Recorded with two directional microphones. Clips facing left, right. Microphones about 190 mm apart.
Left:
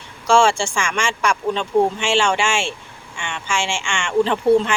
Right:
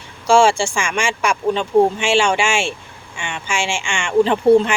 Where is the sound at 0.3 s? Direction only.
10° right (ahead or behind).